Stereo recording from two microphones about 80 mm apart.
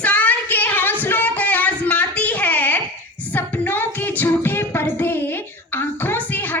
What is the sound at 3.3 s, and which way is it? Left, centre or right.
Music, left.